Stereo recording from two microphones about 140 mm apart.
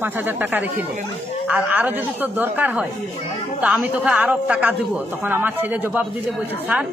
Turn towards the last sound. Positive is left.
turn(degrees=-15)  # may be behind; listen again after turning